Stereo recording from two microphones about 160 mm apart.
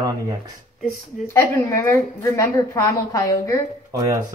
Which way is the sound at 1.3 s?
15° left (ahead or behind).